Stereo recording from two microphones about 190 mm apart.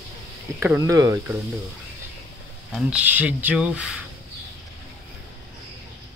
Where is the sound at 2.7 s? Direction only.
5° right (ahead or behind).